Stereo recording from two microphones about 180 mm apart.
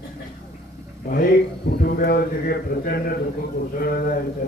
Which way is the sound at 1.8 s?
60° left (ahead or behind).